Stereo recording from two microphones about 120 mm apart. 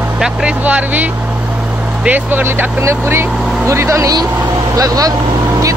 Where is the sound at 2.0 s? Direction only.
15° right (ahead or behind).